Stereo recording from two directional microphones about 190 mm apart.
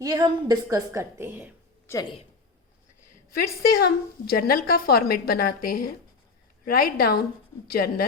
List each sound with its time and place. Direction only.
0.0 s a woman's voice: 20° right (ahead or behind)
1.9 s speech: 20° left (ahead or behind)
3.3 s a woman's voice: 50° left (ahead or behind)